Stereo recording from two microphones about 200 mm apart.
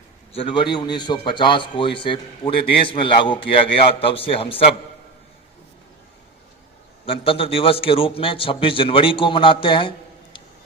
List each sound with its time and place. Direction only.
0.3 s a man's voice: 25° left (ahead or behind)
7.0 s a man's voice: 30° left (ahead or behind)